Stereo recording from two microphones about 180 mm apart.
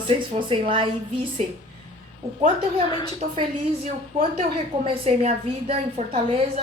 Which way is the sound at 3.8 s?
35° right (ahead or behind).